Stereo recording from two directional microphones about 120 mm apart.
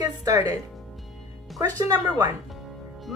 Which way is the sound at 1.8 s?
30° right (ahead or behind).